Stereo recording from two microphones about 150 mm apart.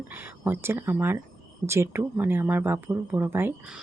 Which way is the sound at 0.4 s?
15° right (ahead or behind).